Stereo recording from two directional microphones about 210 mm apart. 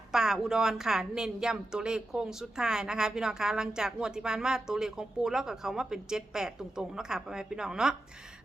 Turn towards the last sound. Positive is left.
turn(degrees=-5)  # may be behind; listen again after turning